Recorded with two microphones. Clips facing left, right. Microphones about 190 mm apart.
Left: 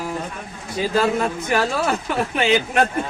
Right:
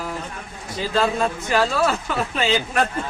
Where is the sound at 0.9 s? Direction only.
15° left (ahead or behind).